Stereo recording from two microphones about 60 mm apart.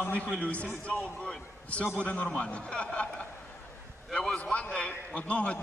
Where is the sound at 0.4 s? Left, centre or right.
Left.